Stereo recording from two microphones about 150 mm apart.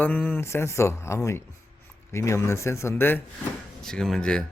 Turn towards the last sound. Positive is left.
turn(degrees=5)  # may be behind; listen again after turning